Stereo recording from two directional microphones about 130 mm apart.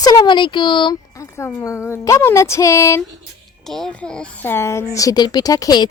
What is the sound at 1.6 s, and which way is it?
A woman's voice, 20° left (ahead or behind).